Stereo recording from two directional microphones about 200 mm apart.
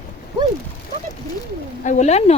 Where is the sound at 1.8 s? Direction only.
35° left (ahead or behind).